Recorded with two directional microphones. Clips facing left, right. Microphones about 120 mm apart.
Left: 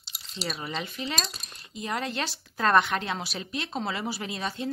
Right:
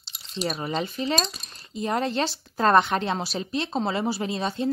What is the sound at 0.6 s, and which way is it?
Speech, 30° right (ahead or behind).